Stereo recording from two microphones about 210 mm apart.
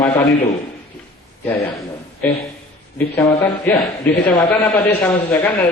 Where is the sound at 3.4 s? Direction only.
5° left (ahead or behind).